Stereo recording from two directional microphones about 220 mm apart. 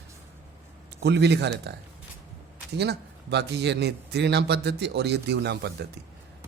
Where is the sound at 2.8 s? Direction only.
50° right (ahead or behind).